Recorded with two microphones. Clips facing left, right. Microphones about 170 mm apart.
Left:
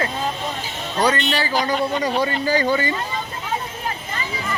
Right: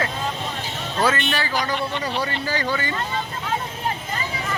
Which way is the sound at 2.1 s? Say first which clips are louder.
Left 5 dB; 40° left (ahead or behind).